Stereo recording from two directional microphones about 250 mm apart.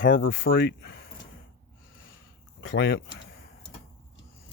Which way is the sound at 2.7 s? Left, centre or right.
Left.